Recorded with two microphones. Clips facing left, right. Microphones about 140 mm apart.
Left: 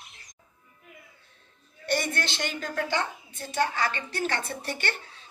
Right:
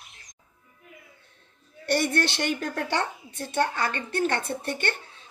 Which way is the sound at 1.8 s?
65° right (ahead or behind).